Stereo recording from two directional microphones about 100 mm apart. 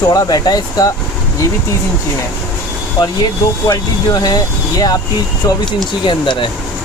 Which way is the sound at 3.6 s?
40° left (ahead or behind).